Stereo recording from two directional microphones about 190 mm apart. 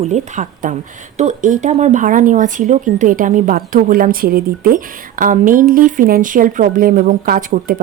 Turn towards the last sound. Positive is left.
turn(degrees=-45)  # may be behind; listen again after turning